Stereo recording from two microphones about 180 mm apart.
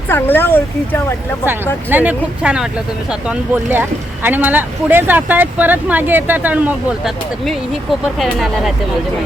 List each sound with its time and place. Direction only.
0.1 s speech: 10° left (ahead or behind)
1.9 s speech: 10° right (ahead or behind)